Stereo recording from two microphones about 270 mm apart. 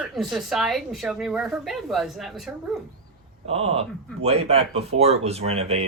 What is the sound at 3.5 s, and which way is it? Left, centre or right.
Speech, right.